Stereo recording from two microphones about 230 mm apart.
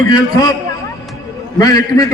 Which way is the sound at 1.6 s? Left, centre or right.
Centre.